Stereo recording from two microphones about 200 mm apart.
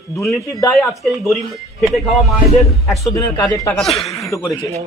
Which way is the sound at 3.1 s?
15° left (ahead or behind).